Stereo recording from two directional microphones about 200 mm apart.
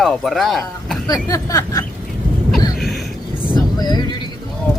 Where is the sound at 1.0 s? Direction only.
20° left (ahead or behind).